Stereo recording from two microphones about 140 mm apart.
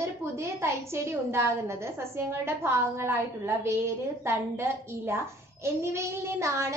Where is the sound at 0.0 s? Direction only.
20° right (ahead or behind).